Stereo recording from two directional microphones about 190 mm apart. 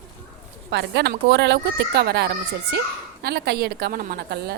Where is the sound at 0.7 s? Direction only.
60° right (ahead or behind).